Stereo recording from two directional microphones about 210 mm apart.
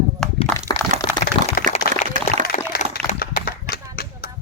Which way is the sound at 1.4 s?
25° right (ahead or behind).